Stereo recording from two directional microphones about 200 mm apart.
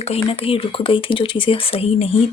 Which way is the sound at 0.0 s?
30° left (ahead or behind).